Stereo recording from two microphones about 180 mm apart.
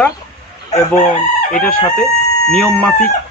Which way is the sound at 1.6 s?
5° left (ahead or behind).